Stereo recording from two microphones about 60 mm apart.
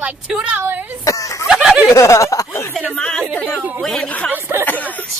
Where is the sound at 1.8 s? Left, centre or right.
Left.